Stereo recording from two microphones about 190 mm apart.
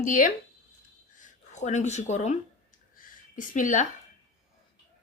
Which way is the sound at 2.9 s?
45° left (ahead or behind).